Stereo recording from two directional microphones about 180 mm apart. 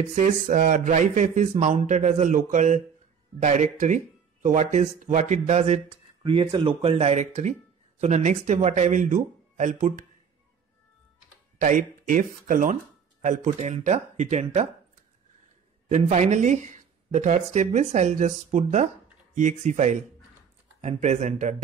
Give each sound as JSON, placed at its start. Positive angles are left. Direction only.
{"t": 0.1, "sound": "speech", "side_deg": -45}
{"t": 11.5, "sound": "speech", "side_deg": -45}
{"t": 15.9, "sound": "speech", "side_deg": -40}